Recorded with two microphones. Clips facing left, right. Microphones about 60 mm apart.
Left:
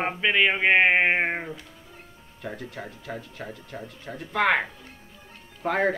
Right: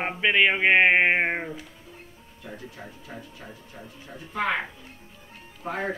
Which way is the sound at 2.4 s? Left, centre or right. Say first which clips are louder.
Left 5 dB; left.